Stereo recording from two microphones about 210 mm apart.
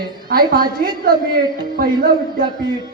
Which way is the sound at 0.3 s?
45° right (ahead or behind).